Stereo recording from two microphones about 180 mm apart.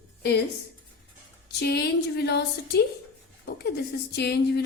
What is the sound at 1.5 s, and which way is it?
A woman's voice, 65° left (ahead or behind).